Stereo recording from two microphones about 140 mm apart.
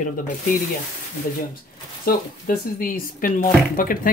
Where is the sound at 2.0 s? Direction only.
90° left.